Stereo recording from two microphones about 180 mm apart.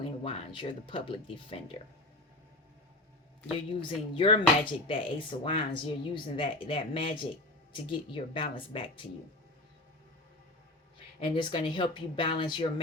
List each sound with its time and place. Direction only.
0.0 s speech: 30° left (ahead or behind)
3.5 s speech: 30° left (ahead or behind)
11.2 s speech: 30° left (ahead or behind)